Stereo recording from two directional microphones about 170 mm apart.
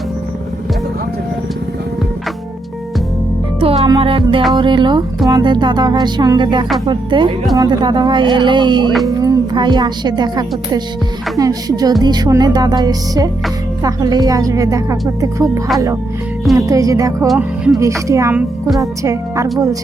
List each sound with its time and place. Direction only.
3.6 s music: 35° right (ahead or behind)
4.5 s a woman's voice: 25° right (ahead or behind)
17.2 s speech: centre (ahead or behind)
18.1 s a woman's voice: 15° right (ahead or behind)